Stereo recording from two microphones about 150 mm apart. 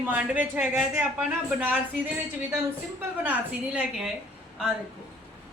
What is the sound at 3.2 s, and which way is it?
Speech, 10° right (ahead or behind).